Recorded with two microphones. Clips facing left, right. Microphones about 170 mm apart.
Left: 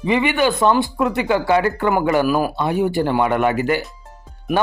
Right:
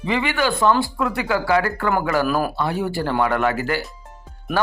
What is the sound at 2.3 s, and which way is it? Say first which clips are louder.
Speech: left 3 dB; 5° left (ahead or behind).